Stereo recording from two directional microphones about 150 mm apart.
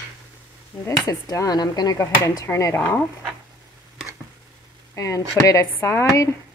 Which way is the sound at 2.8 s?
10° left (ahead or behind).